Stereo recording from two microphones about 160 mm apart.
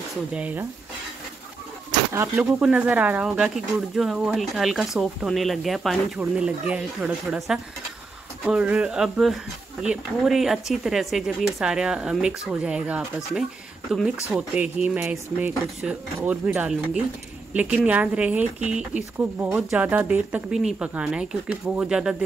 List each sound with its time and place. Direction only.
0.3 s speech: 10° right (ahead or behind)
2.1 s speech: 15° right (ahead or behind)